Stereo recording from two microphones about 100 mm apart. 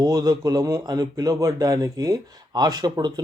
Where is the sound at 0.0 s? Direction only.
40° right (ahead or behind).